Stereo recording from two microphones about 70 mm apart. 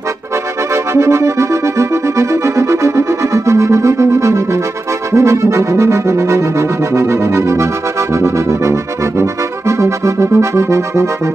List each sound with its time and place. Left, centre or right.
0.9 s music: right